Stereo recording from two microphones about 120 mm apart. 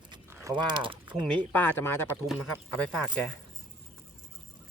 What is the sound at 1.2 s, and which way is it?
Speech, 10° left (ahead or behind).